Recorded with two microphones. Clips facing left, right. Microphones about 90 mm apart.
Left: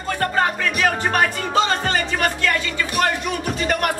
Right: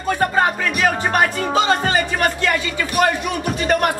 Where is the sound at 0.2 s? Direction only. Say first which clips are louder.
Right 1 dB; 10° right (ahead or behind).